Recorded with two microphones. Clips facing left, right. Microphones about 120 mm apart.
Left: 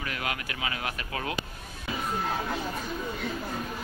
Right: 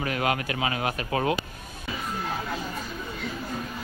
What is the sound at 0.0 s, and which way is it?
Speech, 35° right (ahead or behind).